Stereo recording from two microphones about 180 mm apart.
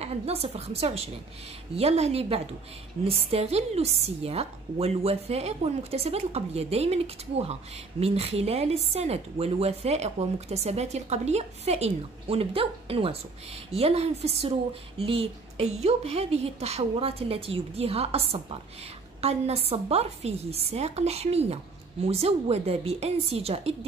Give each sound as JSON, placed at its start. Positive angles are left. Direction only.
{"t": 0.0, "sound": "a woman's voice", "side_deg": -35}